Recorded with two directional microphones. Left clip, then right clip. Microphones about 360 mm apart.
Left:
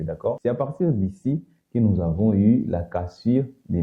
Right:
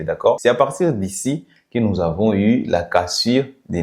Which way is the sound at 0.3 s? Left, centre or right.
Centre.